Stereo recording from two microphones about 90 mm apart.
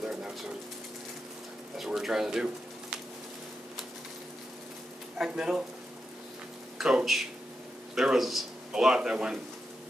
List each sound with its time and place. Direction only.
0.0 s pigeon: 5° right (ahead or behind)
1.8 s speech: 5° right (ahead or behind)
5.1 s speech: 5° right (ahead or behind)
6.8 s speech: 5° right (ahead or behind)